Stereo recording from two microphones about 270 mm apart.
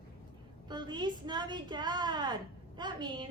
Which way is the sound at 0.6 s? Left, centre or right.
Centre.